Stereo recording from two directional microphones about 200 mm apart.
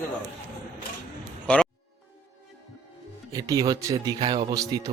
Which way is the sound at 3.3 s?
15° right (ahead or behind).